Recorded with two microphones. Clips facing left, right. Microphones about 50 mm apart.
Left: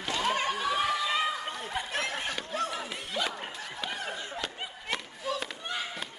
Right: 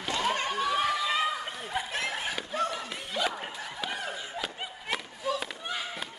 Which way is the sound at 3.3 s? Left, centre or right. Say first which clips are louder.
Right 1 dB; centre.